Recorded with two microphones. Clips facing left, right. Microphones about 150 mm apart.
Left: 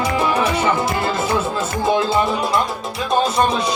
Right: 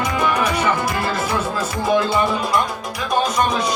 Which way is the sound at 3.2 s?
30° left (ahead or behind).